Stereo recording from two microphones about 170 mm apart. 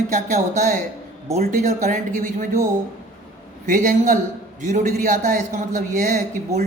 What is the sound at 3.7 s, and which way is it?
A man's voice, 50° right (ahead or behind).